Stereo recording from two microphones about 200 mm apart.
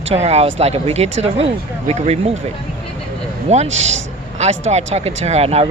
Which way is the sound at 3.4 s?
35° right (ahead or behind).